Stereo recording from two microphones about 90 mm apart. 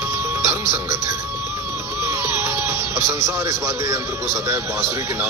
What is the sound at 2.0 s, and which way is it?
Speech, 30° right (ahead or behind).